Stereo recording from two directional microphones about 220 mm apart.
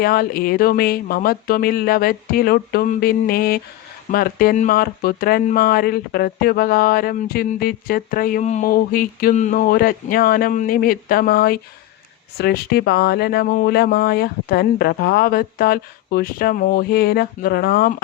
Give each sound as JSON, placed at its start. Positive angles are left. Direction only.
{"t": 0.0, "sound": "speech", "side_deg": 40}